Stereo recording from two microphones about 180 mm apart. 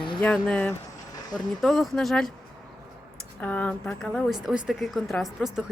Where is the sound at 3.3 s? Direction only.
10° left (ahead or behind).